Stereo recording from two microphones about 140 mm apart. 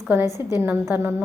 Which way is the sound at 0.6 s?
15° right (ahead or behind).